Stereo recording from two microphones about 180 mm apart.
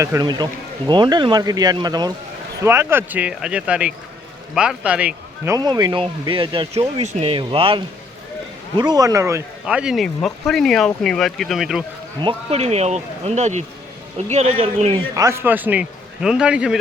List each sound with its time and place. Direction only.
0.0 s a man's voice: 20° right (ahead or behind)
5.5 s speech: 20° right (ahead or behind)
8.8 s speech: 20° right (ahead or behind)
9.6 s speech: 5° right (ahead or behind)
12.2 s speech: 35° right (ahead or behind)
15.1 s a man's voice: 15° right (ahead or behind)